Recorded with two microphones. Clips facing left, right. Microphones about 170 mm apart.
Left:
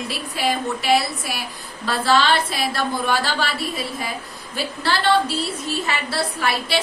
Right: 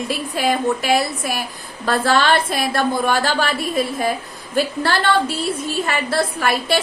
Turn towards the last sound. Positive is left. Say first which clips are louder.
# right 3 dB
turn(degrees=-50)  # may be behind; listen again after turning